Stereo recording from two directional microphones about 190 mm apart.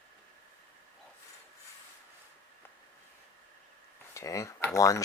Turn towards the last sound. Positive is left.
turn(degrees=15)  # may be behind; listen again after turning